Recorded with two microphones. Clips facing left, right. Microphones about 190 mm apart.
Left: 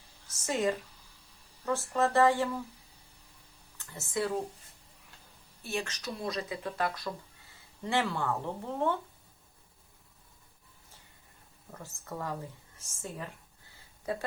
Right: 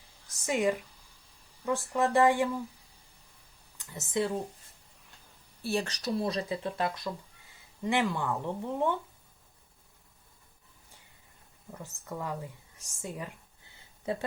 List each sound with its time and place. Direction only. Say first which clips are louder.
0.4 s speech: right 2 dB; 15° right (ahead or behind)
3.8 s speech: right 3 dB; 20° right (ahead or behind)
5.6 s speech: right 5 dB; 35° right (ahead or behind); by 9.0 s 15° right (ahead or behind)
11.7 s speech: right 2 dB; 15° right (ahead or behind)
14.0 s speech: right 2 dB; 25° right (ahead or behind)